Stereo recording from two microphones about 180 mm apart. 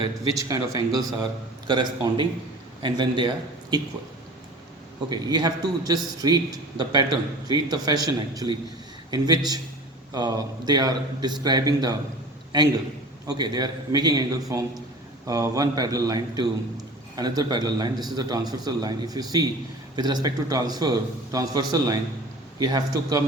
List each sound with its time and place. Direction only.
0.0 s a man's voice: 20° right (ahead or behind)
5.0 s a man's voice: 25° right (ahead or behind)
13.2 s a man's voice: 20° right (ahead or behind)